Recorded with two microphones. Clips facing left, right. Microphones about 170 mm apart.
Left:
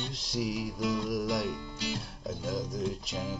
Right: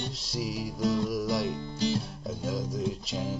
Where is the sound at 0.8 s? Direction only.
40° right (ahead or behind).